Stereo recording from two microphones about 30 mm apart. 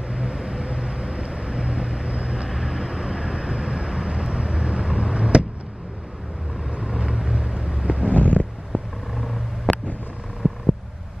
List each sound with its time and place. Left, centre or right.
0.1 s vehicle: right
2.5 s vehicle: right
7.1 s vehicle: right
7.8 s a sound: right
8.2 s stomach rumble: left
8.7 s vehicle: left
9.1 s vehicle: centre
10.4 s a sound: right